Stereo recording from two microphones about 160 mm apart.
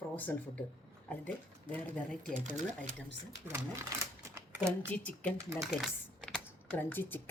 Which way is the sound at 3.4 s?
15° right (ahead or behind).